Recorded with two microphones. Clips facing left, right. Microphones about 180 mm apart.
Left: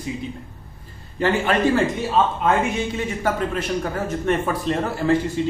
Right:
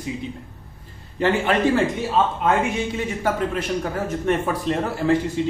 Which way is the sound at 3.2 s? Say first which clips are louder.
Even; 15° right (ahead or behind).